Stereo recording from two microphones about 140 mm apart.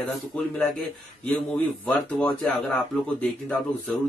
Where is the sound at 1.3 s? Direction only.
10° left (ahead or behind).